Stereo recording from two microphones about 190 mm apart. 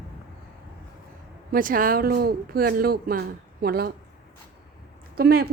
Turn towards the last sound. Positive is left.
turn(degrees=-55)  # may be behind; listen again after turning